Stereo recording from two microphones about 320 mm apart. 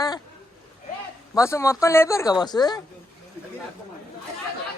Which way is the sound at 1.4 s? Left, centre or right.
Centre.